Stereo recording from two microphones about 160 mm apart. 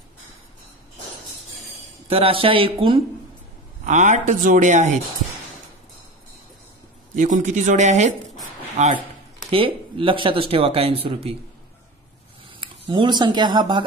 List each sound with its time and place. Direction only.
2.0 s speech: 35° right (ahead or behind)
3.8 s speech: 50° right (ahead or behind)
7.2 s speech: 50° right (ahead or behind)
9.5 s speech: 35° right (ahead or behind)
12.5 s speech: 30° right (ahead or behind)